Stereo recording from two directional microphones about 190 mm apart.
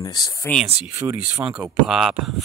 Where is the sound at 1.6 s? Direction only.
5° right (ahead or behind).